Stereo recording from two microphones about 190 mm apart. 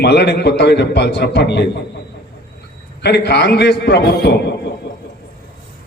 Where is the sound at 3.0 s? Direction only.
60° left (ahead or behind).